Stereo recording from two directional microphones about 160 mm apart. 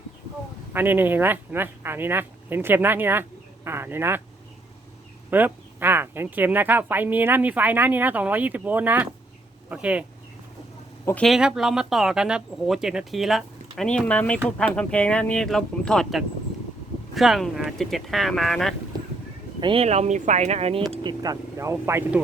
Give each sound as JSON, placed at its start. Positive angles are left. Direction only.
{"t": 0.7, "sound": "speech", "side_deg": -10}
{"t": 5.3, "sound": "speech", "side_deg": -10}
{"t": 11.0, "sound": "speech", "side_deg": 5}
{"t": 19.5, "sound": "speech", "side_deg": -30}
{"t": 21.0, "sound": "speech", "side_deg": -25}